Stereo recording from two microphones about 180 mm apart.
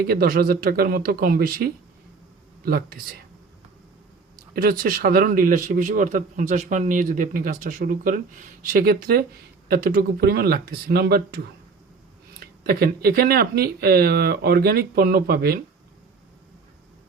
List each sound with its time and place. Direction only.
0.1 s speech: 55° right (ahead or behind)
4.5 s speech: 50° right (ahead or behind)